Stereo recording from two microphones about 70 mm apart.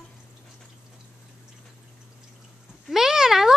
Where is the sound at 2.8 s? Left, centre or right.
Centre.